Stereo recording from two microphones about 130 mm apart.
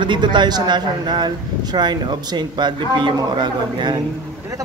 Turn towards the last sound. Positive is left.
turn(degrees=-35)  # may be behind; listen again after turning